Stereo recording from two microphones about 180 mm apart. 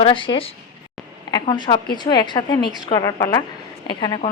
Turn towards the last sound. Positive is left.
turn(degrees=25)  # may be behind; listen again after turning